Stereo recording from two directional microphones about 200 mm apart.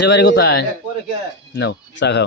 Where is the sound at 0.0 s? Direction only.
60° left (ahead or behind).